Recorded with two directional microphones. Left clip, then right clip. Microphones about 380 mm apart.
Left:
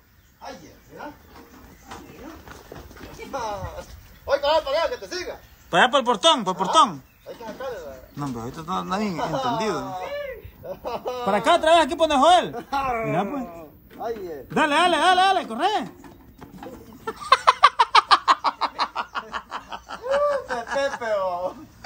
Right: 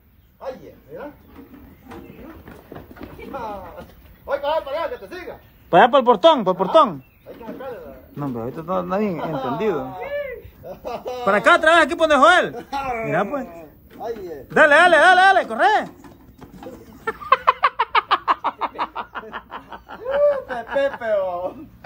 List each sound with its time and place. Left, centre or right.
4.3 s a sound: left
5.7 s speech: centre
8.2 s a man's voice: centre
9.1 s speech: left
9.6 s a man's voice: centre
10.9 s a sound: centre